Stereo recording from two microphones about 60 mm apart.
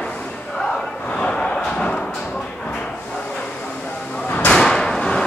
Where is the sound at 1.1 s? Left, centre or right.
Centre.